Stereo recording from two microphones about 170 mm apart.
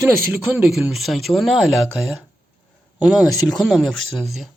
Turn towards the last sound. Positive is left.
turn(degrees=0)  # may be behind; listen again after turning